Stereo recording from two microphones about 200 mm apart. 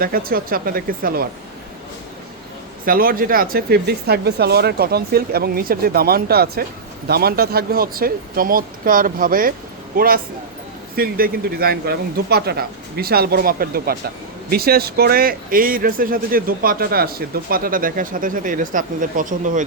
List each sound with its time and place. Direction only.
0.0 s speech: 45° right (ahead or behind)
2.8 s speech: 45° right (ahead or behind)